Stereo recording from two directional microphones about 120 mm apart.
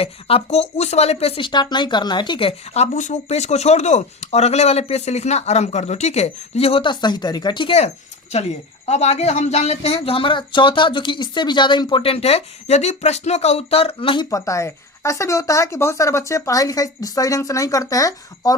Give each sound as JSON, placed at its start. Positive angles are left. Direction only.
{"t": 0.0, "sound": "speech", "side_deg": 55}
{"t": 8.9, "sound": "speech", "side_deg": 65}
{"t": 14.3, "sound": "speech", "side_deg": 25}